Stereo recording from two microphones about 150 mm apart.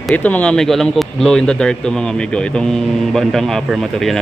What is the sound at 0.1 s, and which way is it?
Speech, 10° left (ahead or behind).